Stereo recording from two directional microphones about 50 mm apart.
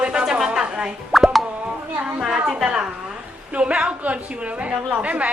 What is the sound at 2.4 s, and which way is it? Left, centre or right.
Speech, centre.